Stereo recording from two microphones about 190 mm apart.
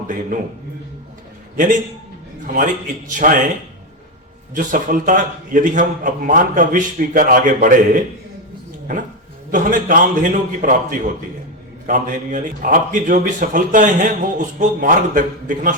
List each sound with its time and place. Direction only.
0.3 s speech: 45° right (ahead or behind)
1.5 s speech: 45° right (ahead or behind)
3.1 s speech: 45° right (ahead or behind)
4.5 s speech: 45° right (ahead or behind)
9.5 s speech: 45° right (ahead or behind)